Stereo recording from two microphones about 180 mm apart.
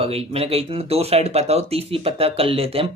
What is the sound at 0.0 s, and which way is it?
Speech, 35° right (ahead or behind).